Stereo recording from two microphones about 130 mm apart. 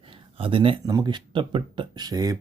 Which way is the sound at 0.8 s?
30° right (ahead or behind).